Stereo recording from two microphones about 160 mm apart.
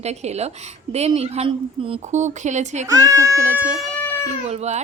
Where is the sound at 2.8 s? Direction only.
20° right (ahead or behind).